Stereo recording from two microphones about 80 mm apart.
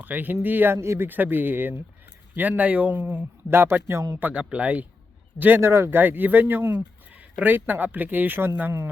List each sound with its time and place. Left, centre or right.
0.0 s speech: right
5.4 s speech: right